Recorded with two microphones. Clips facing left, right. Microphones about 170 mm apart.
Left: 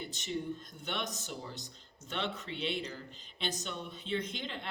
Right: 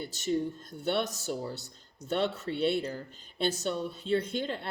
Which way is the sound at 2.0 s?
40° right (ahead or behind).